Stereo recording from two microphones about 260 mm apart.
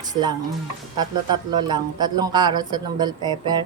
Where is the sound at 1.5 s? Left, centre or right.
Centre.